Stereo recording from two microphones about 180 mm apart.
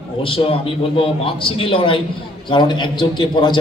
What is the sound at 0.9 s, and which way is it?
A man's voice, 30° left (ahead or behind).